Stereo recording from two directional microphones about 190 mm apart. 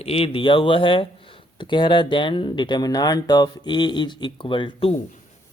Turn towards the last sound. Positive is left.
turn(degrees=30)  # may be behind; listen again after turning